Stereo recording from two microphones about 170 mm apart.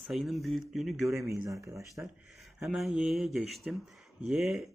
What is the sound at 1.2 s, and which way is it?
Speech, 20° right (ahead or behind).